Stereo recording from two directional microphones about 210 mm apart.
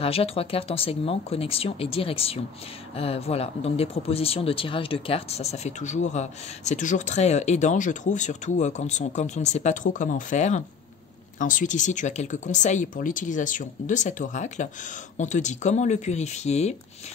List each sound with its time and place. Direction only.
0.0 s speech: 30° left (ahead or behind)